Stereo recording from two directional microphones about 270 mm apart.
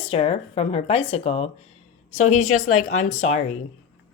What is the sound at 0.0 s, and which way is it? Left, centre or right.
Speech, left.